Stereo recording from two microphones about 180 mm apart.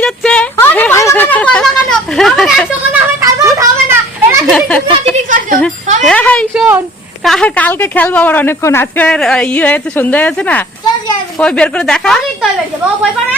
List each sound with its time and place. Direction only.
0.0 s a sound: 5° left (ahead or behind)
3.2 s children playing: 15° right (ahead or behind)
4.4 s a sound: 5° left (ahead or behind)
6.1 s a woman's voice: 5° left (ahead or behind)
6.5 s speech: 5° right (ahead or behind)
7.3 s a woman's voice: 5° left (ahead or behind)